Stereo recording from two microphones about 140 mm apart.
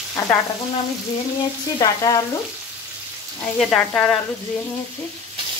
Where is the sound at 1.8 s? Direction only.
25° left (ahead or behind).